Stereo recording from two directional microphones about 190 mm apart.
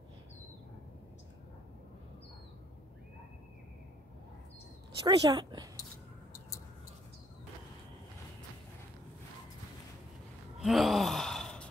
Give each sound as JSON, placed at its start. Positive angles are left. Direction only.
{"t": 5.0, "sound": "speech", "side_deg": -20}
{"t": 10.6, "sound": "gasp", "side_deg": 0}